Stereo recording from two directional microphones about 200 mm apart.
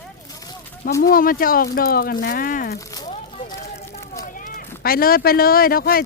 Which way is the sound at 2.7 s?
20° left (ahead or behind).